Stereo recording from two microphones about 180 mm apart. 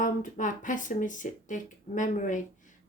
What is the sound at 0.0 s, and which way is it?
Speech, 45° left (ahead or behind).